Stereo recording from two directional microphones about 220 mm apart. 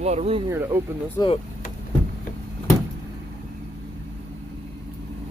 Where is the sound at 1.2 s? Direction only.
15° left (ahead or behind).